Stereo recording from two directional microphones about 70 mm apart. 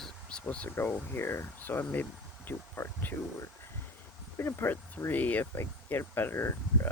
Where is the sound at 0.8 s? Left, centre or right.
Left.